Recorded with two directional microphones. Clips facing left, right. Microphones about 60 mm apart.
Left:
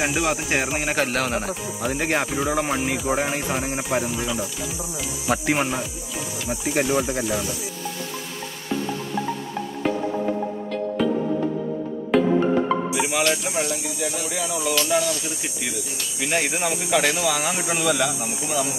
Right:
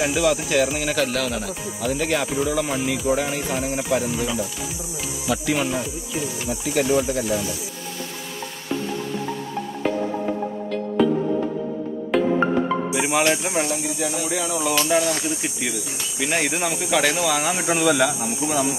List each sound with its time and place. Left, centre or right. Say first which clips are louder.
0.0 s speech: right 3 dB; left
9.9 s music: right 1 dB; centre
12.1 s music: left 1 dB; centre
12.9 s speech: right 2 dB; right
16.4 s speech: right 1 dB; left
17.0 s speech: right 1 dB; right